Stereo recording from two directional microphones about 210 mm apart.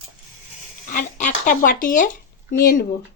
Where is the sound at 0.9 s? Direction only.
40° left (ahead or behind).